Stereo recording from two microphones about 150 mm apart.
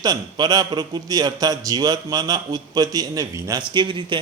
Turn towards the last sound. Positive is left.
turn(degrees=-35)  # may be behind; listen again after turning